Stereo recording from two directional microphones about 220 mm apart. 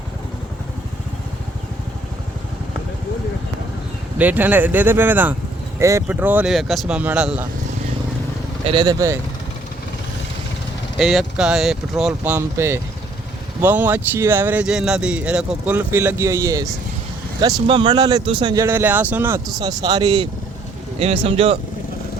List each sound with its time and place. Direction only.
4.2 s speech: 5° right (ahead or behind)
8.6 s speech: 20° right (ahead or behind)
10.9 s speech: centre (ahead or behind); by 21.6 s 25° right (ahead or behind)